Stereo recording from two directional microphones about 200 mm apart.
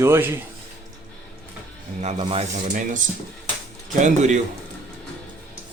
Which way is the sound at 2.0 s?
30° right (ahead or behind).